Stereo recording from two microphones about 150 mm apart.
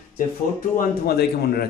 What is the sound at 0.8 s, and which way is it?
Speech, 90° left.